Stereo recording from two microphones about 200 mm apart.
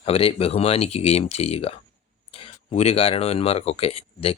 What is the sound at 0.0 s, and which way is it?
Speech, 30° left (ahead or behind).